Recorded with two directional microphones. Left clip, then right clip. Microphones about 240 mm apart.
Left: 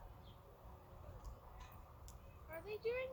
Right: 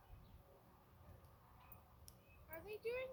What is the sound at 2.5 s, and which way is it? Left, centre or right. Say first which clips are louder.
Speech: left 4 dB; right.